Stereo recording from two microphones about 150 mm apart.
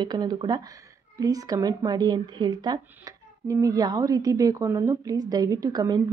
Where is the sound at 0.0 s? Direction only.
30° right (ahead or behind).